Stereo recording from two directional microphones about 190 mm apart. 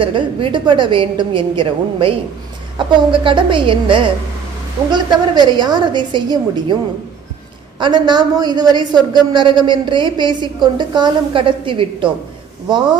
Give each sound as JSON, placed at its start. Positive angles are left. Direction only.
{"t": 0.0, "sound": "a man's voice", "side_deg": -25}
{"t": 7.8, "sound": "a man's voice", "side_deg": -25}